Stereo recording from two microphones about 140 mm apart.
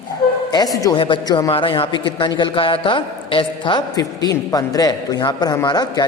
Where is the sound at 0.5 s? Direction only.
25° left (ahead or behind).